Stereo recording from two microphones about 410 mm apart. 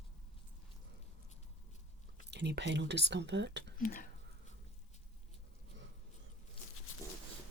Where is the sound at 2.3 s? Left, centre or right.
Right.